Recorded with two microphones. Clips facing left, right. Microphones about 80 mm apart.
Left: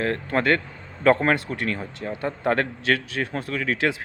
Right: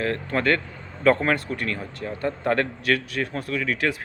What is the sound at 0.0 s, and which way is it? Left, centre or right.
Speech, left.